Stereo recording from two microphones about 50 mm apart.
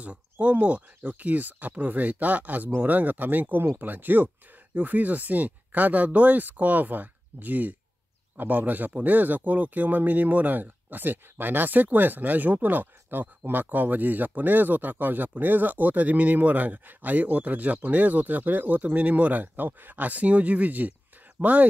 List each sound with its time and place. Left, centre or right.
0.0 s speech: right